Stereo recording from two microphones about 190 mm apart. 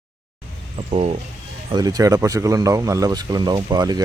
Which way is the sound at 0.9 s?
35° right (ahead or behind).